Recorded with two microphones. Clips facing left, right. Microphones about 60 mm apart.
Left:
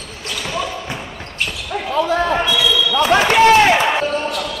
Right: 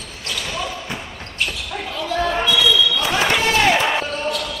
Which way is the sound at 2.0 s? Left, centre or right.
Left.